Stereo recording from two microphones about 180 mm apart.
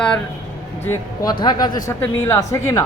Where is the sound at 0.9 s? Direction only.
20° left (ahead or behind).